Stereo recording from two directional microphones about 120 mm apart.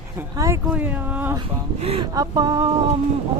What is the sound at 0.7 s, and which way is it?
Speech, 15° right (ahead or behind).